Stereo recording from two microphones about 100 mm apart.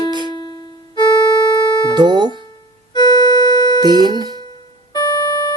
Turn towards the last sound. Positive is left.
turn(degrees=40)  # may be behind; listen again after turning